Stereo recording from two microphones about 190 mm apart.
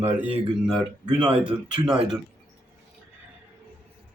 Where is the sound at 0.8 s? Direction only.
25° right (ahead or behind).